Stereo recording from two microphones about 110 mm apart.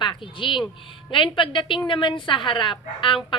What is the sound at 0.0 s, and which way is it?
A woman's voice, 45° left (ahead or behind).